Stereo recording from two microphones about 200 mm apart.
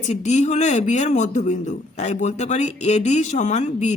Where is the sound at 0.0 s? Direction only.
35° left (ahead or behind).